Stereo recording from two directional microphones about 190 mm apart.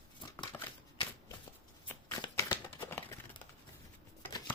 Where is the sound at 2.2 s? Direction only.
20° left (ahead or behind).